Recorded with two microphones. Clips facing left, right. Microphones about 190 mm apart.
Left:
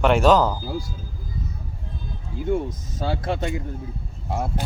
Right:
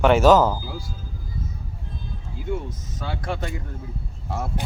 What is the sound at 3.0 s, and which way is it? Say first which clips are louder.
Speech: left 4 dB; 30° left (ahead or behind).